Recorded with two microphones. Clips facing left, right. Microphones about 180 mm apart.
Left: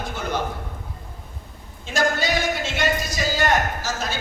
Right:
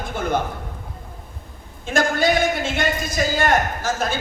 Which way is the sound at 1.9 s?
50° right (ahead or behind).